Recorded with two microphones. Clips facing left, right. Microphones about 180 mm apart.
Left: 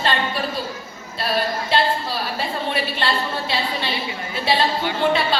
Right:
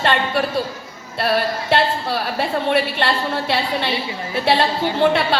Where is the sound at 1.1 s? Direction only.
65° right (ahead or behind).